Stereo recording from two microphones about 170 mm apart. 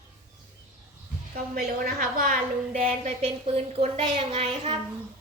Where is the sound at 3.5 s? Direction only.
35° right (ahead or behind).